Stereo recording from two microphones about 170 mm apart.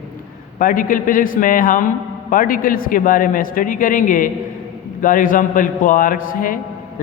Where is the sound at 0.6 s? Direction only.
55° left (ahead or behind).